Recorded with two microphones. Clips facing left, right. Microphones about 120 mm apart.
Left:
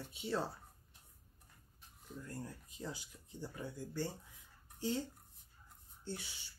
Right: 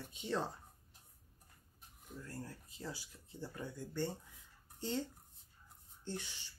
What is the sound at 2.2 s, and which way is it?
Speech, 20° left (ahead or behind).